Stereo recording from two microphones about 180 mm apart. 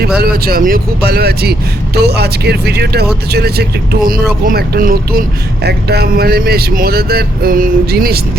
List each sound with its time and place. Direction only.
0.2 s a man's voice: 55° right (ahead or behind)